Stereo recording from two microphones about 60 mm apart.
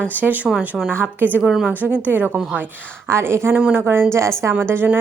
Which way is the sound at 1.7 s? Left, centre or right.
Right.